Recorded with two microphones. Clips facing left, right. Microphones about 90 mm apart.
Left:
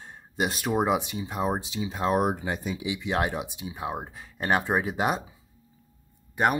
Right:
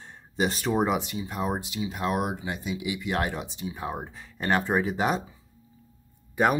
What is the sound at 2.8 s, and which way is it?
Speech, 20° left (ahead or behind).